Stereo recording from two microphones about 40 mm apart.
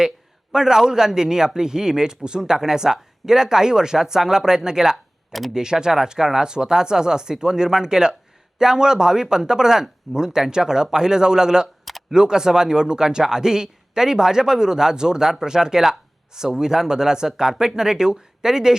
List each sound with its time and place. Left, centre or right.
0.5 s speech: centre